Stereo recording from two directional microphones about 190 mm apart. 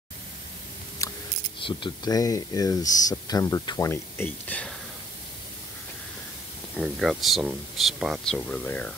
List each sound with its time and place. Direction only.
1.0 s scissors: 15° left (ahead or behind)
1.6 s speech: 25° left (ahead or behind); by 4.7 s 5° left (ahead or behind)
6.7 s speech: centre (ahead or behind)